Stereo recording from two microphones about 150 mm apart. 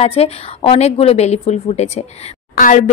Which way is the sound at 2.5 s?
60° left (ahead or behind).